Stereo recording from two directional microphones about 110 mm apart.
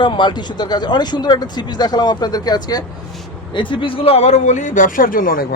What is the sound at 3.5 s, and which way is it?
Speech, 50° left (ahead or behind).